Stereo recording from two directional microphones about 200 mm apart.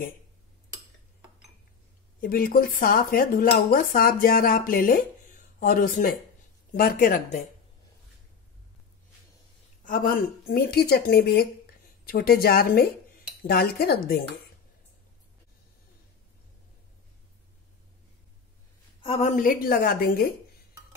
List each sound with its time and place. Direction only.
2.1 s speech: 45° left (ahead or behind)
9.8 s speech: 45° left (ahead or behind)
18.9 s speech: 30° left (ahead or behind); by 20.3 s 50° left (ahead or behind)